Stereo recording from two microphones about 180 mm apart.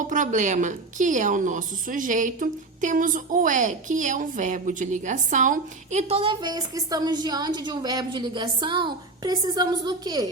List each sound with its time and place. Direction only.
0.0 s a woman's voice: 45° right (ahead or behind); by 10.2 s 20° right (ahead or behind)